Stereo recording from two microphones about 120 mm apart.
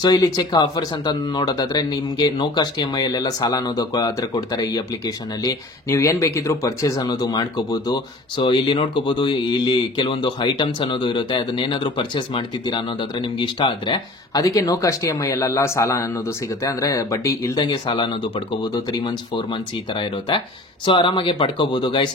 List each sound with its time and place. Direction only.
0.0 s speech: 35° left (ahead or behind)
7.0 s speech: 35° left (ahead or behind)
14.4 s speech: 30° left (ahead or behind)
17.6 s speech: 40° left (ahead or behind)